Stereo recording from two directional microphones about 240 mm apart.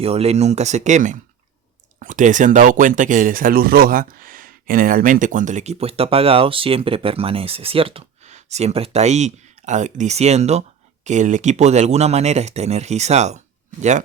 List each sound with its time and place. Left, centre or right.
0.0 s speech: right